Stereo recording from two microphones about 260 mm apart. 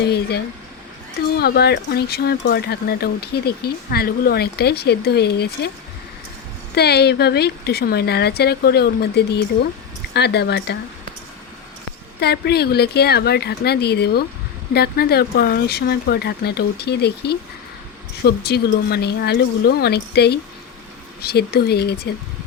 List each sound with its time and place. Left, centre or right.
0.1 s speech: left
6.7 s speech: left
12.2 s speech: left